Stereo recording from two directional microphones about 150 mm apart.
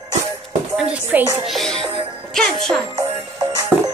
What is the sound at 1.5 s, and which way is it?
Speech, centre (ahead or behind).